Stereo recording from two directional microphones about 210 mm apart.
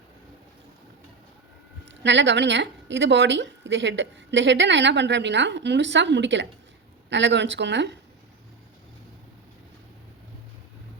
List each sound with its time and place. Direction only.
1.8 s speech: 60° right (ahead or behind)